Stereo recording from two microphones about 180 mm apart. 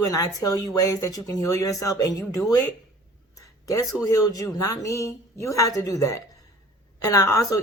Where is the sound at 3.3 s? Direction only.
20° left (ahead or behind).